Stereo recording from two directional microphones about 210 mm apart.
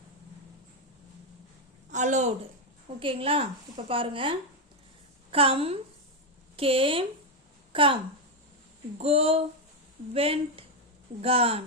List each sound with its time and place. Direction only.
1.9 s a woman's voice: 35° right (ahead or behind)
9.0 s a woman's voice: 30° right (ahead or behind)